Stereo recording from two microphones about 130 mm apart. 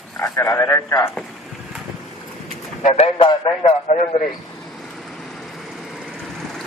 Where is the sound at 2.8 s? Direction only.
60° left (ahead or behind).